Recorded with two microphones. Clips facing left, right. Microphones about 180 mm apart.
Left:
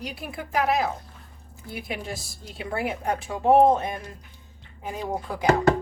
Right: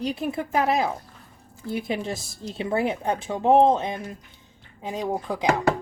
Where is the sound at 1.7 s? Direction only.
25° right (ahead or behind).